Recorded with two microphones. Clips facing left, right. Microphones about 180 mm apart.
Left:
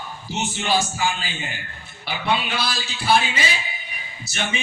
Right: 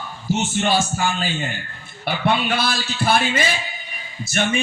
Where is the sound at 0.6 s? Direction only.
50° right (ahead or behind).